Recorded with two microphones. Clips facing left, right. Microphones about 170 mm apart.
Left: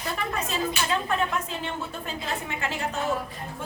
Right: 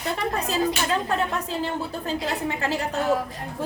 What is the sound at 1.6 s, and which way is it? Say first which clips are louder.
A woman's voice: right 5 dB; 35° right (ahead or behind).